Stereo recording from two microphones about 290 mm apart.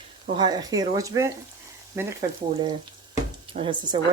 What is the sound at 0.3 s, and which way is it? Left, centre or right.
A woman's voice, centre.